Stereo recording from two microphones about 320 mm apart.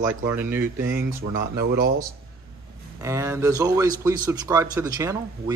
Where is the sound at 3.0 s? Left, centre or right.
Centre.